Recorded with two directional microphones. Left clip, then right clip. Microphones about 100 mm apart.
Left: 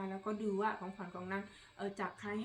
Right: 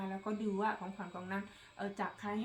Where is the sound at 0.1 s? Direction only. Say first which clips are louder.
Left 1 dB; 25° right (ahead or behind).